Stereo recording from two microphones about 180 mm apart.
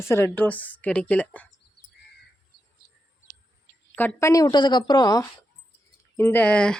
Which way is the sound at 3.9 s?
15° left (ahead or behind).